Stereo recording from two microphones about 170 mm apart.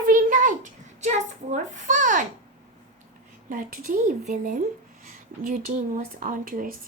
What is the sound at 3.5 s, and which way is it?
A woman's voice, 55° right (ahead or behind).